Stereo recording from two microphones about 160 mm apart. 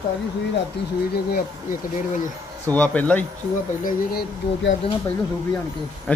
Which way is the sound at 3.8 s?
70° left (ahead or behind).